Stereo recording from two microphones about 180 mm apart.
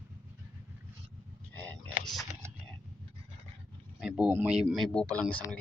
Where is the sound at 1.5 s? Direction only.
10° left (ahead or behind).